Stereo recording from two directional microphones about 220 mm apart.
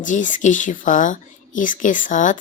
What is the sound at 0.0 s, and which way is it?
Speech, 35° left (ahead or behind).